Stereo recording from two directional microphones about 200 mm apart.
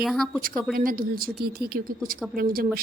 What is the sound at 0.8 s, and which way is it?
A woman's voice, 45° right (ahead or behind).